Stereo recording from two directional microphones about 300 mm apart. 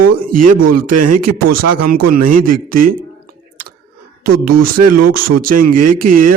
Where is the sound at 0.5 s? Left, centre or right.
Right.